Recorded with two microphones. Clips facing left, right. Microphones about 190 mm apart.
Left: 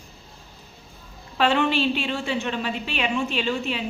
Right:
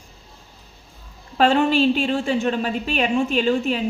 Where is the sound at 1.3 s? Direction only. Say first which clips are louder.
Right 4 dB; 45° right (ahead or behind).